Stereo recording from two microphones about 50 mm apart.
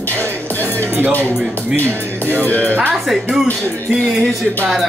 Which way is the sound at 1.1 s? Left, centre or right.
Left.